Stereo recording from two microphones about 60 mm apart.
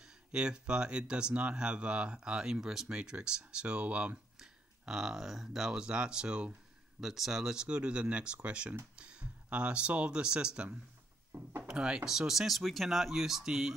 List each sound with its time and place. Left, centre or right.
0.0 s speech: centre
4.4 s speech: centre
7.0 s speech: centre